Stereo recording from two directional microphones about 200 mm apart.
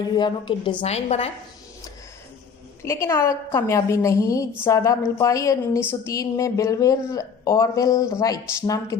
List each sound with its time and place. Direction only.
0.2 s speech: 25° left (ahead or behind)
2.8 s a woman's voice: 15° left (ahead or behind)